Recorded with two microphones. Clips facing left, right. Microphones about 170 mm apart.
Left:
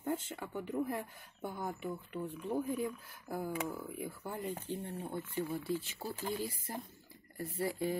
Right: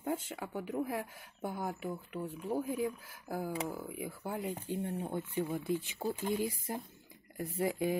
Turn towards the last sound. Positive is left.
turn(degrees=-15)  # may be behind; listen again after turning